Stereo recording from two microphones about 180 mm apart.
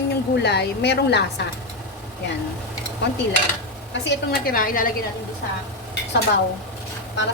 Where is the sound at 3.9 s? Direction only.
65° left (ahead or behind); by 4.9 s 50° left (ahead or behind).